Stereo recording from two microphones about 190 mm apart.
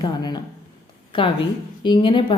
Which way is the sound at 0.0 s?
20° left (ahead or behind).